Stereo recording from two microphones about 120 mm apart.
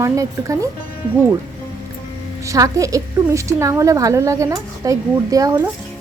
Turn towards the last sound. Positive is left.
turn(degrees=-30)  # may be behind; listen again after turning